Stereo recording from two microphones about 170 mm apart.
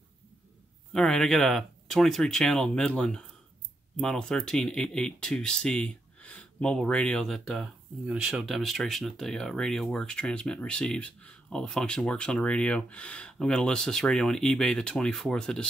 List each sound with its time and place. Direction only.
0.9 s speech: 5° left (ahead or behind)